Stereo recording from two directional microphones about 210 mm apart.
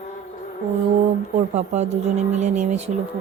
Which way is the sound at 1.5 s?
30° right (ahead or behind).